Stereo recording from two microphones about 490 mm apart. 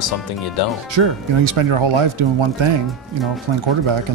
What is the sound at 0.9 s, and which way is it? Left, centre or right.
Speech, right.